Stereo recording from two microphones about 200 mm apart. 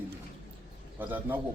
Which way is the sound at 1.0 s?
10° right (ahead or behind).